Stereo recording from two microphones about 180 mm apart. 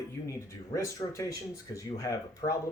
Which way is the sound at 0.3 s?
15° left (ahead or behind).